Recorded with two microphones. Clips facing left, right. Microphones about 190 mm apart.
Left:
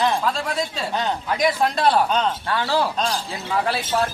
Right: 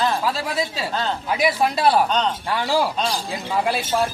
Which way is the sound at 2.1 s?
5° left (ahead or behind).